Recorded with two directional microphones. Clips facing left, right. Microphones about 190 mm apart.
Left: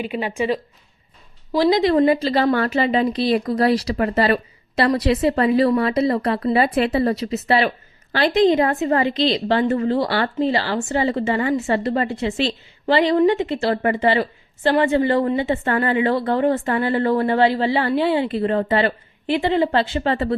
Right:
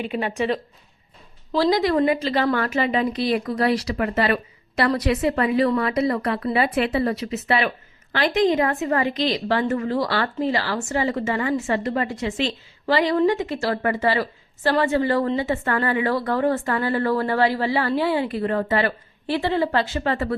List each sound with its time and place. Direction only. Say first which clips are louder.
0.0 s speech: left 1 dB; 5° left (ahead or behind)
1.5 s a woman's voice: left 3 dB; 20° left (ahead or behind)